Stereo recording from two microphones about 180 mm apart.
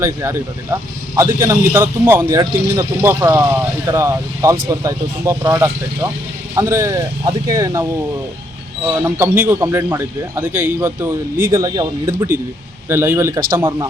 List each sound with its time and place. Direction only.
0.0 s speech: 15° right (ahead or behind)
8.9 s speech: 20° right (ahead or behind)